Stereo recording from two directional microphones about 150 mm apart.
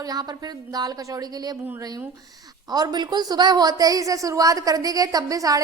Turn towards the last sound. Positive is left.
turn(degrees=-25)  # may be behind; listen again after turning